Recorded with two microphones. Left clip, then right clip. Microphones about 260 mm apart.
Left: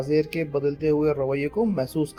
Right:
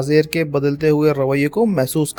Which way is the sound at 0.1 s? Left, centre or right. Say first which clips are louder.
Right 8 dB; right.